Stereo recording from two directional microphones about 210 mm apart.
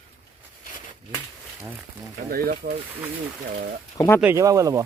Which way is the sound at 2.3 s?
45° right (ahead or behind).